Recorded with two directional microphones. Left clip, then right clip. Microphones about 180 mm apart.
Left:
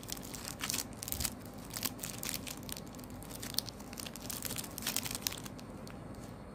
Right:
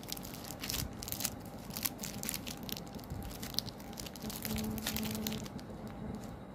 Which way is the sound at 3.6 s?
15° left (ahead or behind).